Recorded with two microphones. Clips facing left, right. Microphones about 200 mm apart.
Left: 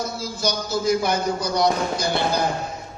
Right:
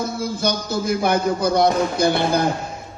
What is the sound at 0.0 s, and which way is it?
A man's voice, 55° right (ahead or behind).